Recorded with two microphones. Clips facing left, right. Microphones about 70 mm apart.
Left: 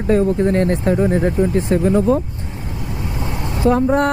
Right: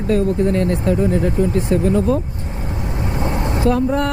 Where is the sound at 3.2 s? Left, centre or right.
Right.